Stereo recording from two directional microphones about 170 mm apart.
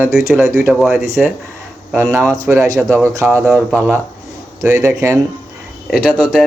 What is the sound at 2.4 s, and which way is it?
Speech, 20° right (ahead or behind).